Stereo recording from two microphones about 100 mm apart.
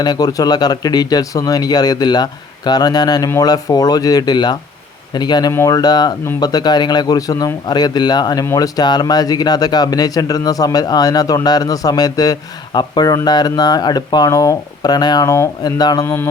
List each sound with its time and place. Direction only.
0.0 s speech: 45° left (ahead or behind)